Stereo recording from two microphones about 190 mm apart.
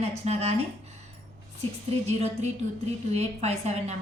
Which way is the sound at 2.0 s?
35° right (ahead or behind).